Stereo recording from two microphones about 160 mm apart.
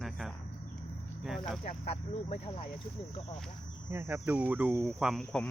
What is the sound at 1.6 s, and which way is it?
Speech, 45° left (ahead or behind).